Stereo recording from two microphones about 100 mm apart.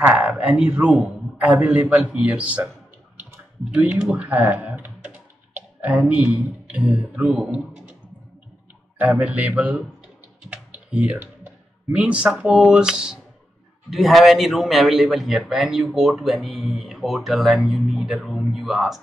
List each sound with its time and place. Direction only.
0.0 s a sound: 15° right (ahead or behind)
1.0 s speech: 10° right (ahead or behind)
8.9 s a man's voice: 15° right (ahead or behind)